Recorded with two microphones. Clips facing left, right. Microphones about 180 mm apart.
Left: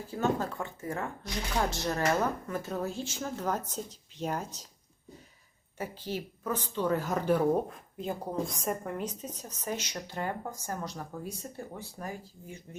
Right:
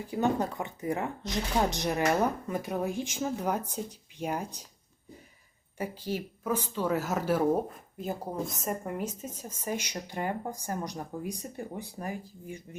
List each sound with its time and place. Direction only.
0.1 s speech: 15° right (ahead or behind)
5.7 s speech: 10° right (ahead or behind)